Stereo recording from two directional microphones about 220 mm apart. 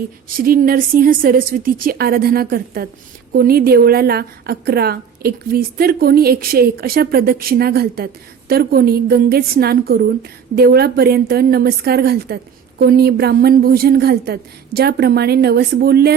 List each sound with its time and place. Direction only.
0.3 s a woman's voice: 40° right (ahead or behind)